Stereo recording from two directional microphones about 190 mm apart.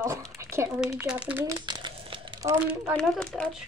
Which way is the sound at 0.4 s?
15° right (ahead or behind).